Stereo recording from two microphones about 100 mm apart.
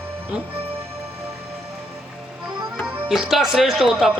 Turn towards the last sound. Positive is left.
turn(degrees=-5)  # may be behind; listen again after turning